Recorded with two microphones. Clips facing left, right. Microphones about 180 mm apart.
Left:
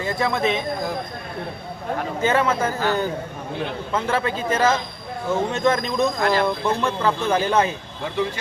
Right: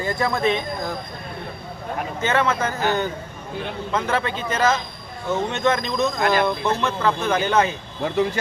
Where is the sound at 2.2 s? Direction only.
10° left (ahead or behind).